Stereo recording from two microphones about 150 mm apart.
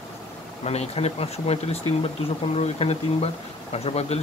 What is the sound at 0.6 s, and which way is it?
Speech, 45° left (ahead or behind).